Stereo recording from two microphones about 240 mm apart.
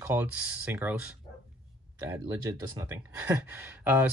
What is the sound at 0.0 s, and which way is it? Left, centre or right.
Speech, centre.